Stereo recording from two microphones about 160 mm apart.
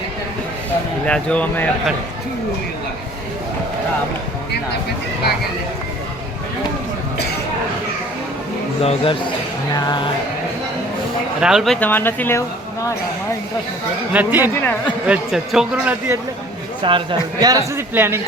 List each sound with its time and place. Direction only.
1.0 s speech: 5° left (ahead or behind)
8.8 s speech: 40° left (ahead or behind)
9.7 s music: 25° left (ahead or behind)
11.3 s speech: 5° right (ahead or behind); by 12.4 s 15° left (ahead or behind)
14.1 s a man's voice: 10° right (ahead or behind)
14.5 s speech: 15° left (ahead or behind)
15.0 s a man's voice: 5° right (ahead or behind)
16.8 s speech: 30° right (ahead or behind); by 18.2 s 15° right (ahead or behind)